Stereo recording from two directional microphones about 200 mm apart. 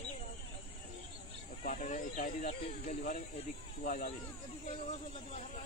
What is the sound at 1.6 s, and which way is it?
Speech, 40° left (ahead or behind).